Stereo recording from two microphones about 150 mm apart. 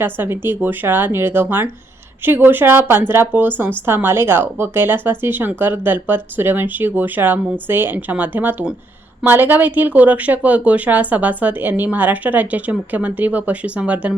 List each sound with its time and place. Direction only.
0.0 s speech: 15° right (ahead or behind)